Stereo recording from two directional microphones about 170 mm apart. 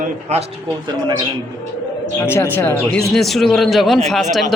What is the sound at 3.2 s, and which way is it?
Speech, centre (ahead or behind).